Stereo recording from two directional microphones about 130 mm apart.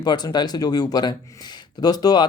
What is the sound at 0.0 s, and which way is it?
Speech, 35° left (ahead or behind).